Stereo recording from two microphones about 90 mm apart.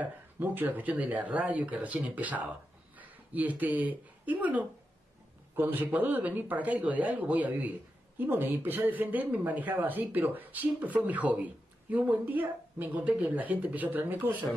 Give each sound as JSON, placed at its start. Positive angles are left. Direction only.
{"t": 0.0, "sound": "speech", "side_deg": -20}